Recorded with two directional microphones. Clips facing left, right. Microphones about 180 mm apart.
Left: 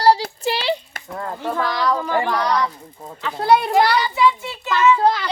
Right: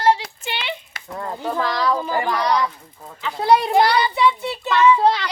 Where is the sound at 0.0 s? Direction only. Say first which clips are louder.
Left 3 dB; 35° left (ahead or behind).